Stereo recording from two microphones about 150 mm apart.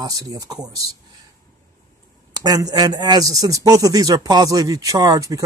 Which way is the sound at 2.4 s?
25° right (ahead or behind).